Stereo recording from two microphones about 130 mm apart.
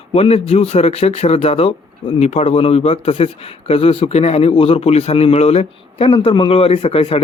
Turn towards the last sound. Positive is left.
turn(degrees=45)  # may be behind; listen again after turning